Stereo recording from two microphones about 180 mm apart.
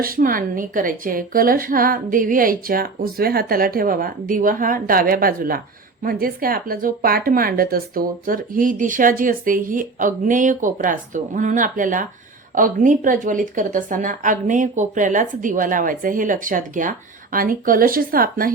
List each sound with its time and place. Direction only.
0.0 s speech: 50° right (ahead or behind)